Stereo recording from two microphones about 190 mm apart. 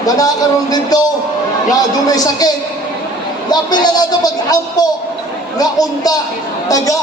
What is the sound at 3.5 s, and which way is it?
Speech, 20° left (ahead or behind).